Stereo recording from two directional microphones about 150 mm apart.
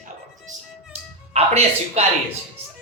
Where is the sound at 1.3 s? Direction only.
45° right (ahead or behind).